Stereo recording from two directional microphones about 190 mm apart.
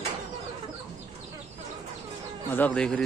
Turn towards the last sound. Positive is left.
turn(degrees=5)  # may be behind; listen again after turning